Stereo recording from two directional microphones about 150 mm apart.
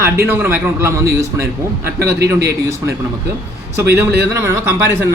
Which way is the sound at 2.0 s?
90° right.